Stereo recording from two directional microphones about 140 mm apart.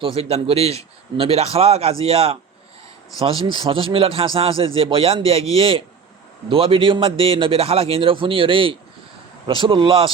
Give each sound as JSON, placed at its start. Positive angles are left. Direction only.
{"t": 0.0, "sound": "a man's voice", "side_deg": -45}
{"t": 3.5, "sound": "a man's voice", "side_deg": -40}